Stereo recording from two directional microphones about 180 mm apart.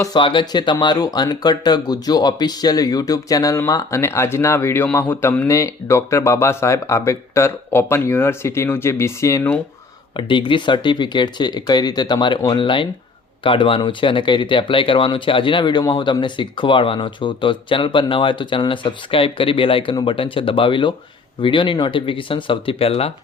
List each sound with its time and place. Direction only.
0.0 s speech: 25° left (ahead or behind)
10.2 s speech: 25° left (ahead or behind)